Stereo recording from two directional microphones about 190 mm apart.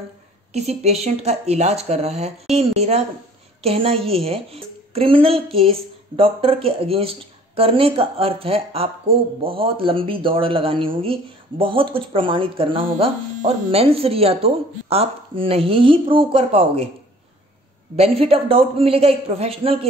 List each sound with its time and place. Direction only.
0.5 s a woman's voice: 35° right (ahead or behind)
17.9 s a woman's voice: 30° right (ahead or behind)